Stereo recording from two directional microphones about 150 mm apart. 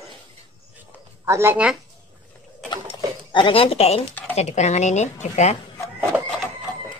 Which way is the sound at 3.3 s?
35° left (ahead or behind).